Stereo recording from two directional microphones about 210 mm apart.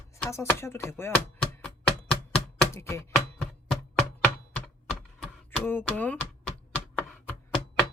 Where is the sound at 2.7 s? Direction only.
15° left (ahead or behind).